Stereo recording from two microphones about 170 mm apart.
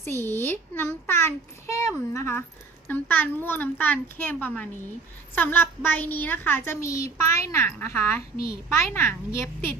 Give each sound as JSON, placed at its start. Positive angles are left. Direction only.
{"t": 0.0, "sound": "a child's voice", "side_deg": 15}